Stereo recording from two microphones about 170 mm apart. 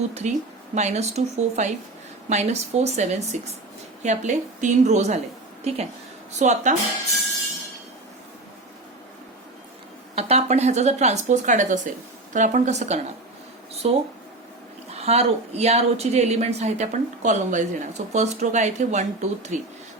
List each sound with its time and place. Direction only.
0.1 s a woman's voice: 40° right (ahead or behind)
10.2 s a woman's voice: 40° right (ahead or behind)
15.0 s a woman's voice: 40° right (ahead or behind)